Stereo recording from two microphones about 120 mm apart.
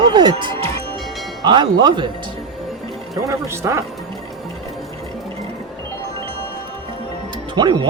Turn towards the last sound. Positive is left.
turn(degrees=-40)  # may be behind; listen again after turning